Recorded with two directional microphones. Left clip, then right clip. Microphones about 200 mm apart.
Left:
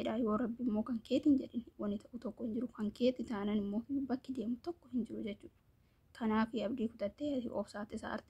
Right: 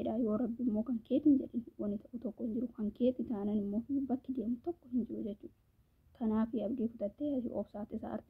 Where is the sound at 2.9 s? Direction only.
10° left (ahead or behind).